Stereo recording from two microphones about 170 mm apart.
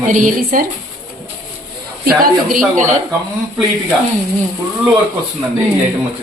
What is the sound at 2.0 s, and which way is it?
Speech, 60° right (ahead or behind).